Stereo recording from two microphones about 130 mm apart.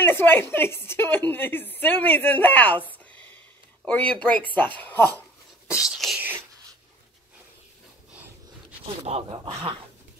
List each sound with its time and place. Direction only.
0.0 s a woman's voice: 15° left (ahead or behind)
5.7 s speech: 5° right (ahead or behind)
8.8 s speech: 50° right (ahead or behind)